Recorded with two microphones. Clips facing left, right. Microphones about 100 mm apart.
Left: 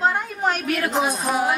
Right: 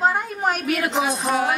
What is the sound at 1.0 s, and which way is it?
Music, 15° left (ahead or behind).